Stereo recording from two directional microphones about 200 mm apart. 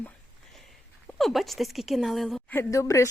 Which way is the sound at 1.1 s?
Centre (ahead or behind).